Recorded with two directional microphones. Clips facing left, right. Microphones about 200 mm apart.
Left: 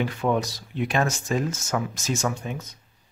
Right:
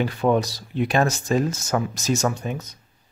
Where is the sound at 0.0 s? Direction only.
35° right (ahead or behind).